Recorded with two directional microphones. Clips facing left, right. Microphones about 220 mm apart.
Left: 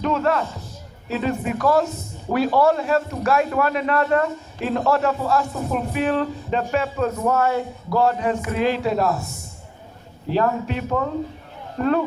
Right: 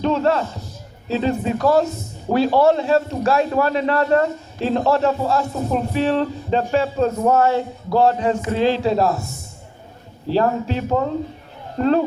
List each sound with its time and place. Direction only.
0.0 s a man's voice: 30° right (ahead or behind)
10.2 s a man's voice: 30° right (ahead or behind)